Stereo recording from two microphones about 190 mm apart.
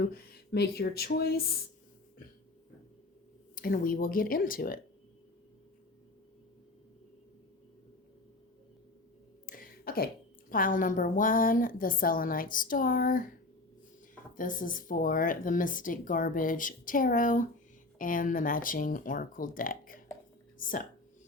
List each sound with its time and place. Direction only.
0.1 s speech: 60° left (ahead or behind)
3.5 s speech: 50° left (ahead or behind)
9.5 s throat clearing: 50° left (ahead or behind)
10.5 s speech: 45° left (ahead or behind)
14.3 s speech: 45° left (ahead or behind)